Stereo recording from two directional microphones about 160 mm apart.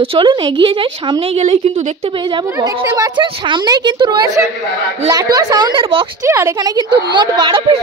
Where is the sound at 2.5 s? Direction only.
20° right (ahead or behind).